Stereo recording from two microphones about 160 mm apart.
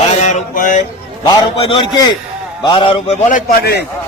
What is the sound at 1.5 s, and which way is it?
A man's voice, 30° left (ahead or behind).